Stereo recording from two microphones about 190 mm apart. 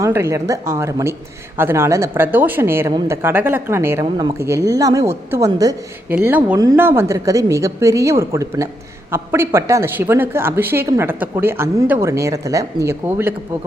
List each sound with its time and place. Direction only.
0.0 s a woman's voice: 15° right (ahead or behind)